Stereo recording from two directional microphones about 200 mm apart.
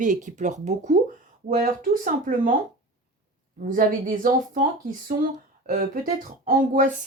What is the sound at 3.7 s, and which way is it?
Speech, 45° right (ahead or behind).